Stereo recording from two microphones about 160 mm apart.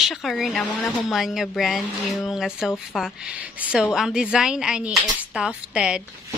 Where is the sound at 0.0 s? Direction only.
Centre (ahead or behind).